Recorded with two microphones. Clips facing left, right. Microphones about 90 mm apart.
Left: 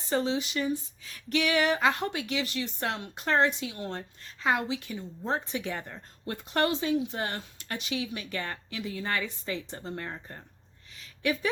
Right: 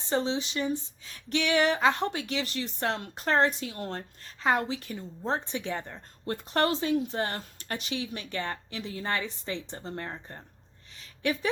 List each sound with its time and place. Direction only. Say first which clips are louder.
0.1 s speech: even; 30° right (ahead or behind)